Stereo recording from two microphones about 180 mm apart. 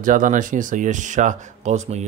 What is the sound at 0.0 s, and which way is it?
Speech, 45° right (ahead or behind).